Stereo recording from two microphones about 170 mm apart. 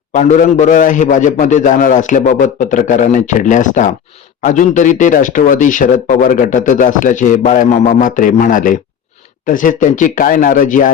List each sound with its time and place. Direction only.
0.1 s speech: 45° left (ahead or behind)